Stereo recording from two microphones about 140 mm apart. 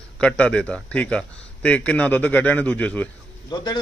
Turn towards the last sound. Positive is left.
turn(degrees=30)  # may be behind; listen again after turning